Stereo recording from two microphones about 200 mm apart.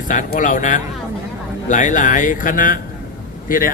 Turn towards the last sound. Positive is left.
turn(degrees=45)  # may be behind; listen again after turning